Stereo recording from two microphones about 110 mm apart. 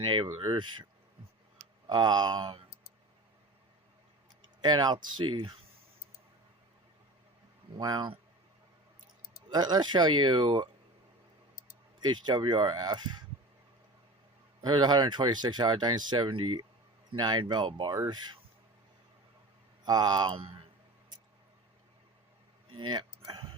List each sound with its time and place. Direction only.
0.0 s speech: 45° right (ahead or behind)
1.9 s speech: 40° right (ahead or behind)
4.6 s speech: 40° right (ahead or behind)
7.8 s speech: 35° right (ahead or behind)
9.5 s speech: 40° right (ahead or behind)
11.9 s speech: 40° right (ahead or behind)
14.6 s speech: 40° right (ahead or behind)
17.9 s speech: 35° right (ahead or behind)
19.8 s speech: 40° right (ahead or behind)
22.9 s a sound: 45° right (ahead or behind)